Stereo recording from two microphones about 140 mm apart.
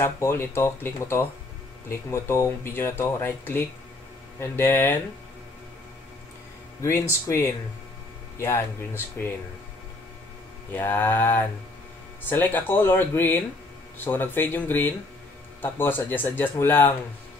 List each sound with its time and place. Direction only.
0.0 s speech: 20° left (ahead or behind)
6.8 s speech: 20° left (ahead or behind)
10.7 s speech: 15° left (ahead or behind)